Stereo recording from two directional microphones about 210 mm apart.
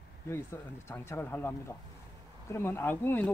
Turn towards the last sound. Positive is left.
turn(degrees=10)  # may be behind; listen again after turning